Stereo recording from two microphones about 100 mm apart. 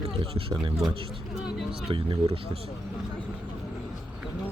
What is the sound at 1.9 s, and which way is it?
Speech, 65° right (ahead or behind).